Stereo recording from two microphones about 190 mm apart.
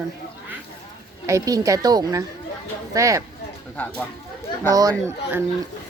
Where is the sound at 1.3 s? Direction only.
15° right (ahead or behind).